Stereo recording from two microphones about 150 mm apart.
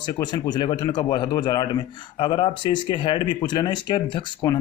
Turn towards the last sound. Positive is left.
turn(degrees=30)  # may be behind; listen again after turning